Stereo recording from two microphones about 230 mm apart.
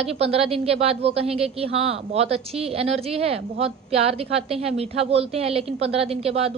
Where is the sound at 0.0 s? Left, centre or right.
Right.